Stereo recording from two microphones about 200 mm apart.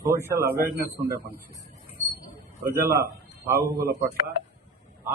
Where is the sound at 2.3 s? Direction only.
10° right (ahead or behind).